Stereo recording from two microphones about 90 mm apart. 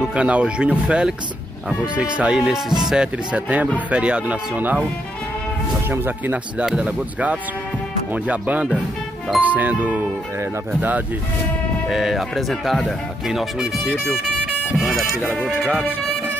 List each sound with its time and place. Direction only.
0.0 s speech: 10° right (ahead or behind)
5.9 s speech: 25° right (ahead or behind)
6.6 s speech: 10° right (ahead or behind)
11.9 s speech: 5° right (ahead or behind)